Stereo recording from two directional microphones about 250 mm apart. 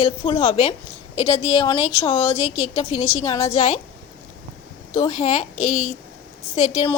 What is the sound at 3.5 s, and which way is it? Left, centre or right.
Speech, left.